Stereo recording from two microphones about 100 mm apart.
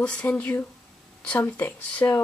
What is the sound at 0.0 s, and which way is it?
A child's voice, 10° left (ahead or behind).